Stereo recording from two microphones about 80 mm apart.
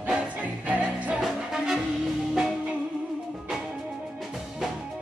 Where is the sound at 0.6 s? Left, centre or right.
Centre.